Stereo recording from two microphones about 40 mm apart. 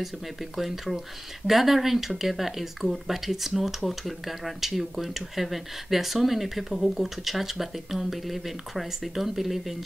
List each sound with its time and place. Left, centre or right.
0.6 s speech: centre